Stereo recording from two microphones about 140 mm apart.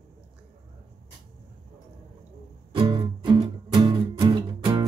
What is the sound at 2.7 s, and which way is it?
Music, 35° right (ahead or behind).